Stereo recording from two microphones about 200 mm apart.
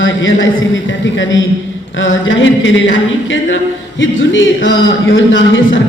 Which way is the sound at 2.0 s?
70° left (ahead or behind).